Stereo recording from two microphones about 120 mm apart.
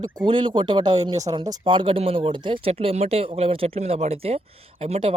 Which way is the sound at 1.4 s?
40° right (ahead or behind).